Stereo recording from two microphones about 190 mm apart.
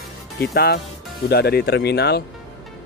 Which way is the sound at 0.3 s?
55° left (ahead or behind).